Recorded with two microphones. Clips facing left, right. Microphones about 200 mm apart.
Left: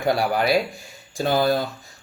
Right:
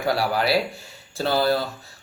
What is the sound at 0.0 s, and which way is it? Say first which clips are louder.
Speech: left 2 dB; 20° left (ahead or behind).